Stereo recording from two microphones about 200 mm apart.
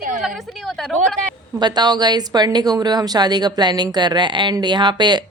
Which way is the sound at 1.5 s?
20° right (ahead or behind).